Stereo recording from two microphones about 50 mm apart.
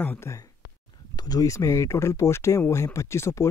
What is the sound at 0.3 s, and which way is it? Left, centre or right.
Speech, left.